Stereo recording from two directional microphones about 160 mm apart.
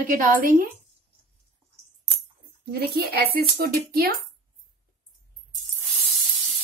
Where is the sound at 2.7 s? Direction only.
85° right.